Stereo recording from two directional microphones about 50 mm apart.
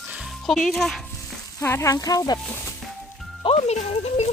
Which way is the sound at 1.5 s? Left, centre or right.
Left.